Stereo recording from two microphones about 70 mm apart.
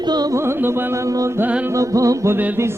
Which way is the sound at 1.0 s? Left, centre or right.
Right.